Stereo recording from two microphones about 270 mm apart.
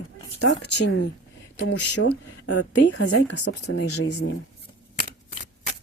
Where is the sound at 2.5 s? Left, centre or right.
Left.